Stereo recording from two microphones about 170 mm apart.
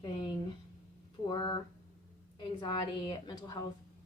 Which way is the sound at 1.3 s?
25° left (ahead or behind).